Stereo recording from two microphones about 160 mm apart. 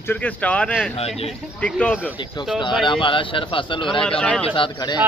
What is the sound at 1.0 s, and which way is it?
Speech, 40° left (ahead or behind).